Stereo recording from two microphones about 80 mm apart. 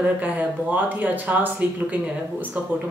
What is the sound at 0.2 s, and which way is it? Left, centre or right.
Speech, right.